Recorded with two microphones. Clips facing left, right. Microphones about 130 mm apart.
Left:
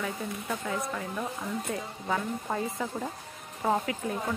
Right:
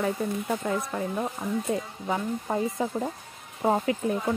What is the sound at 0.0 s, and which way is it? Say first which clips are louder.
Speech: right 7 dB; 35° right (ahead or behind).